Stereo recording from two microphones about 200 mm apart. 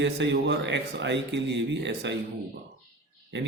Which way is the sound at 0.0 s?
60° right (ahead or behind).